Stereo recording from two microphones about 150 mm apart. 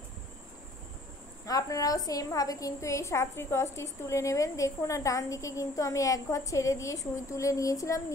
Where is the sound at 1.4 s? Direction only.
20° left (ahead or behind).